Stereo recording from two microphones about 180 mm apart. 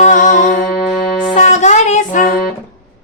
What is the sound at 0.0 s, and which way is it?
Music, 45° left (ahead or behind).